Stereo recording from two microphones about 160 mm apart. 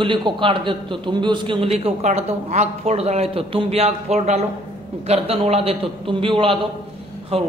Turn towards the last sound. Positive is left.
turn(degrees=-40)  # may be behind; listen again after turning